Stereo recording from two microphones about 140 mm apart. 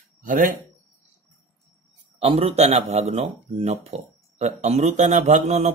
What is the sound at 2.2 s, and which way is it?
A man's voice, 45° right (ahead or behind).